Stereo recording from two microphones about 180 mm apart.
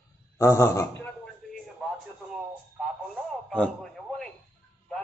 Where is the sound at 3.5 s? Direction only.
5° left (ahead or behind).